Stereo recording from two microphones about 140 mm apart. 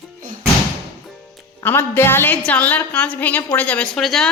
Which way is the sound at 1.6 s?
15° left (ahead or behind).